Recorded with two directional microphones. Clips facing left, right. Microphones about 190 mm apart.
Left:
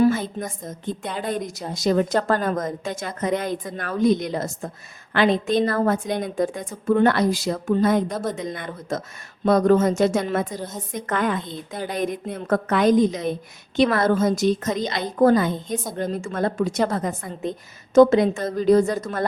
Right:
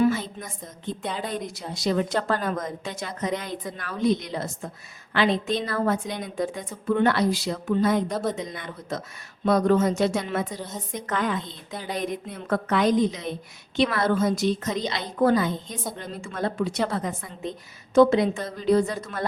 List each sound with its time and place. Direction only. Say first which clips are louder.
0.0 s speech: left 3 dB; 45° left (ahead or behind)